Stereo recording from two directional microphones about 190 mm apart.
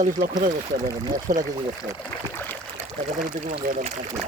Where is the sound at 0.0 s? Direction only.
45° right (ahead or behind).